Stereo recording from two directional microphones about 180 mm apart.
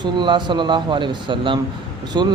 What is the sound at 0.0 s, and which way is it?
Speech, 25° right (ahead or behind).